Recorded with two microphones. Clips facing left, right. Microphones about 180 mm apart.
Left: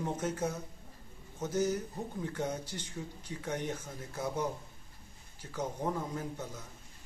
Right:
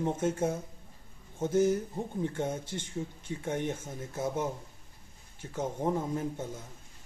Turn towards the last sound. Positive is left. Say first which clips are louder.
# right 5 dB
turn(degrees=-25)  # may be behind; listen again after turning